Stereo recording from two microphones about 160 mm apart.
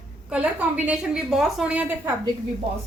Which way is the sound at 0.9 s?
5° right (ahead or behind).